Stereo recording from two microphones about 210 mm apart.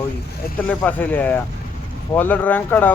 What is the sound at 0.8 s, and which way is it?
Speech, 5° left (ahead or behind).